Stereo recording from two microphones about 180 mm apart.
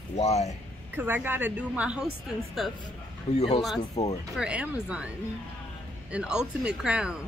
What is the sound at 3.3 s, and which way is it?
Speech, 35° left (ahead or behind).